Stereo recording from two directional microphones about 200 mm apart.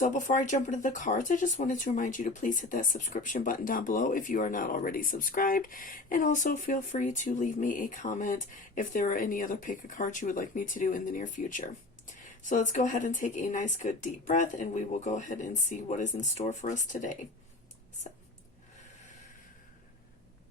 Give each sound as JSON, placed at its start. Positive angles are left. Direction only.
{"t": 0.0, "sound": "speech", "side_deg": 40}